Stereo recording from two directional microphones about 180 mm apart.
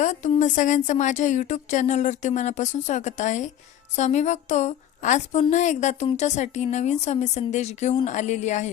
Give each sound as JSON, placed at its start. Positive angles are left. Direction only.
{"t": 0.0, "sound": "a woman's voice", "side_deg": 40}